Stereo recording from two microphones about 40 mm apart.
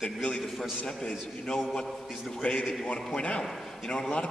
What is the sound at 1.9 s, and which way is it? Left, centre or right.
Speech, centre.